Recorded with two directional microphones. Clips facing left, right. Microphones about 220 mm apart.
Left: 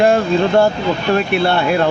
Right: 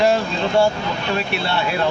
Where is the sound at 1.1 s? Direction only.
55° left (ahead or behind).